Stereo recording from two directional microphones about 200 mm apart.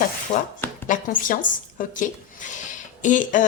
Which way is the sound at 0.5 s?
10° left (ahead or behind).